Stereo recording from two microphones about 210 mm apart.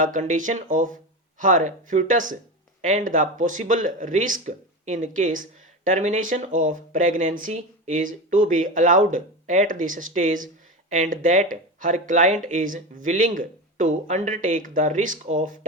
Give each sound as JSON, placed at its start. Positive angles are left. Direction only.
{"t": 0.0, "sound": "speech", "side_deg": -35}